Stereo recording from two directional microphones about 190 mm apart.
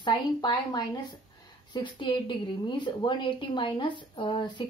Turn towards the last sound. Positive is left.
turn(degrees=25)  # may be behind; listen again after turning